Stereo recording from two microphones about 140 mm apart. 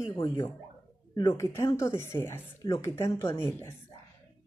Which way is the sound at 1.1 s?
25° left (ahead or behind).